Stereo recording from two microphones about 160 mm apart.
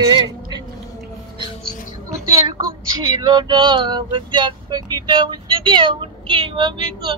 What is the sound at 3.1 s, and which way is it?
Male singing, 25° right (ahead or behind).